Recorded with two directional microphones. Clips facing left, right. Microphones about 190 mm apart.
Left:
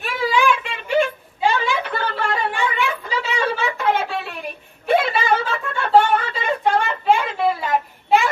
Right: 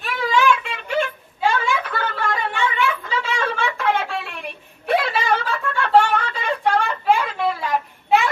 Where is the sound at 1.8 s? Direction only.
30° left (ahead or behind).